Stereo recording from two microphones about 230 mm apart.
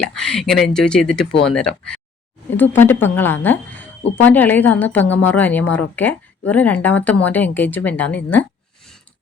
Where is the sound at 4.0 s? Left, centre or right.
Left.